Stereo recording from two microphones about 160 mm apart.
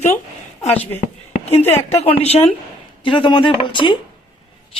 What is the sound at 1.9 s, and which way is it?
A woman's voice, 40° left (ahead or behind).